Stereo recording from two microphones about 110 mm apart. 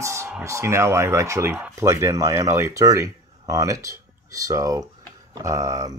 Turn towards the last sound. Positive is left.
turn(degrees=-35)  # may be behind; listen again after turning